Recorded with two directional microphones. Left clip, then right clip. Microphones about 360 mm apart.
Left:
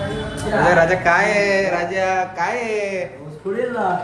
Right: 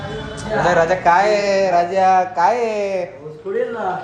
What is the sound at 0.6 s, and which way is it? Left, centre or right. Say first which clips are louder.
Speech: even; centre.